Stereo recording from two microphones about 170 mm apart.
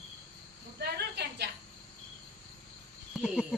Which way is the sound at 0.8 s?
75° right (ahead or behind).